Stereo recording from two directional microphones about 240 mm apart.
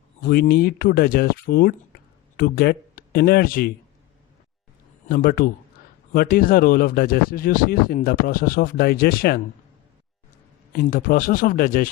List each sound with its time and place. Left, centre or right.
0.3 s speech: left
5.0 s speech: left
10.7 s speech: left